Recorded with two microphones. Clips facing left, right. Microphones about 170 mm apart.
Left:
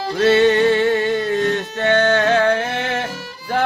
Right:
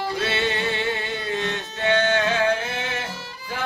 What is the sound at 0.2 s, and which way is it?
Music, 45° left (ahead or behind).